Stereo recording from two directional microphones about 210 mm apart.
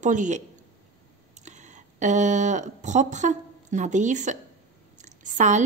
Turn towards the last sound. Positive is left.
turn(degrees=-35)  # may be behind; listen again after turning